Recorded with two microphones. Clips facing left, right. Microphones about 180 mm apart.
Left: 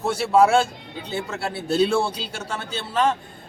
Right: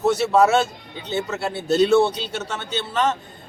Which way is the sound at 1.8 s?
30° left (ahead or behind).